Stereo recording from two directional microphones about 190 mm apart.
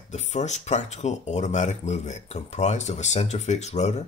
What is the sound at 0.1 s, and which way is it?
Speech, 35° left (ahead or behind).